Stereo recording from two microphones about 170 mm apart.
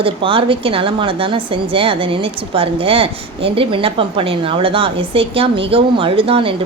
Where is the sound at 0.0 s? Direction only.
30° right (ahead or behind).